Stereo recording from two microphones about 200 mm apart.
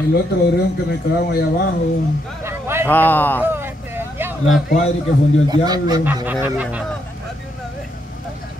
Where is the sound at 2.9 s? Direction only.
10° left (ahead or behind).